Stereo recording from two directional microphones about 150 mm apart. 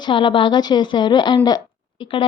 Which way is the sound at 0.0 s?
35° left (ahead or behind).